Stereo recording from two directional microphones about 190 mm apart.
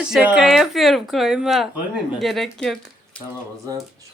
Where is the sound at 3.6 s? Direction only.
15° right (ahead or behind).